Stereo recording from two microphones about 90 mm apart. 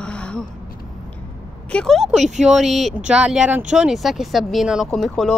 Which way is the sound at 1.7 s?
10° left (ahead or behind).